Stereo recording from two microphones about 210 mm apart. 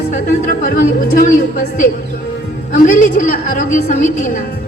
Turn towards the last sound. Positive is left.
turn(degrees=40)  # may be behind; listen again after turning